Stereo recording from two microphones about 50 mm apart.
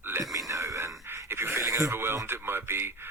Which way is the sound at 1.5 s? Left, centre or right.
Right.